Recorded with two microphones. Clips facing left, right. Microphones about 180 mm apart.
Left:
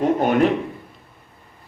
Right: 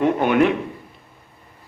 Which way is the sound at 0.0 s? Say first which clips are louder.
Even; 40° left (ahead or behind).